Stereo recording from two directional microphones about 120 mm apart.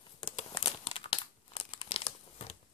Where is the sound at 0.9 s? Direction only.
45° left (ahead or behind).